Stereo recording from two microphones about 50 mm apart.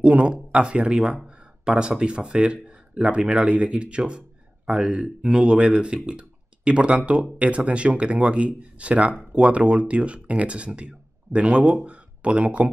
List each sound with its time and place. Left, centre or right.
0.0 s speech: right